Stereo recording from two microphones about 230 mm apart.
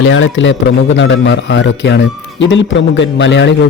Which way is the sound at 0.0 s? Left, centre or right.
Left.